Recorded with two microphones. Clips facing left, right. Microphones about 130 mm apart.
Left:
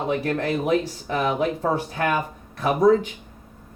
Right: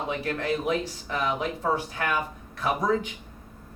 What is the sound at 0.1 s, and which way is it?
Speech, 50° left (ahead or behind).